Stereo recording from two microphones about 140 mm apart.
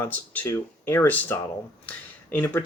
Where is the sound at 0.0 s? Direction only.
15° left (ahead or behind).